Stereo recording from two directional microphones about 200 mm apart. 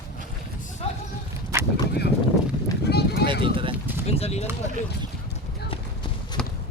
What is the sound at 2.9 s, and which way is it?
Run, 55° left (ahead or behind).